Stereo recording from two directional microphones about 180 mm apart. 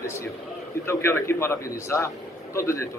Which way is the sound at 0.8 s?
15° left (ahead or behind).